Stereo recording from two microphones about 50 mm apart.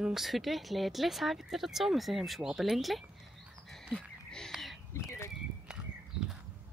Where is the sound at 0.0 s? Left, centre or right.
Centre.